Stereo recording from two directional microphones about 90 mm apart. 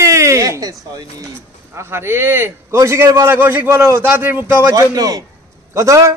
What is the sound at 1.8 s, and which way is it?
A man's voice, 30° right (ahead or behind).